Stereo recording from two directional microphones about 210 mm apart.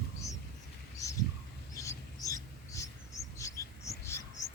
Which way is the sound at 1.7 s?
15° left (ahead or behind).